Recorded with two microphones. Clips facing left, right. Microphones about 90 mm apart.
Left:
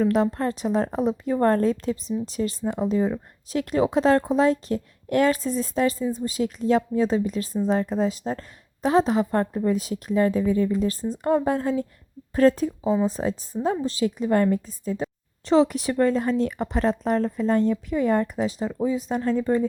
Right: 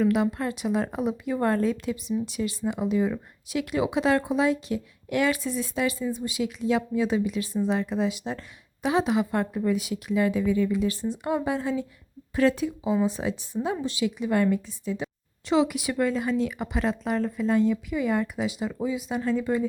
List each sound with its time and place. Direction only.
0.0 s a woman's voice: 40° left (ahead or behind)